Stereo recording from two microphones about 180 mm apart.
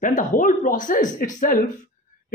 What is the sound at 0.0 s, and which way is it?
Speech, 45° left (ahead or behind).